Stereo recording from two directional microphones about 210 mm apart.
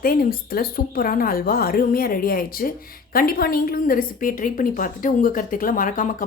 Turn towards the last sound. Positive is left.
turn(degrees=40)  # may be behind; listen again after turning